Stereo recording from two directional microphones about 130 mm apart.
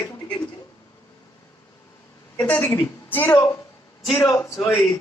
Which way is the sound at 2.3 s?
10° left (ahead or behind).